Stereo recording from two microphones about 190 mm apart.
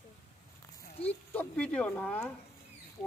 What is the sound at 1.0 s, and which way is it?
Speech, 10° left (ahead or behind).